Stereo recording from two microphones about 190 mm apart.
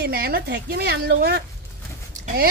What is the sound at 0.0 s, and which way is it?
A woman's voice, 55° right (ahead or behind).